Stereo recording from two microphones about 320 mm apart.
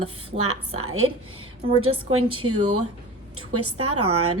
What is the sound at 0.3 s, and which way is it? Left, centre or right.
Speech, right.